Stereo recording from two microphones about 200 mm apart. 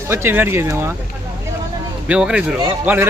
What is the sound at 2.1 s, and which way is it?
Speech, 5° right (ahead or behind).